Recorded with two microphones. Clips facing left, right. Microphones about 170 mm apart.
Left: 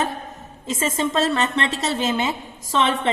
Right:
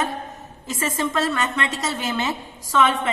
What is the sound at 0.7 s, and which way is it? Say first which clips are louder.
A woman's voice: left 2 dB; 20° left (ahead or behind).